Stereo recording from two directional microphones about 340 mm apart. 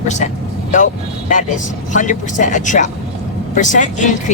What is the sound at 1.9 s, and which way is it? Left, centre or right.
Speech, left.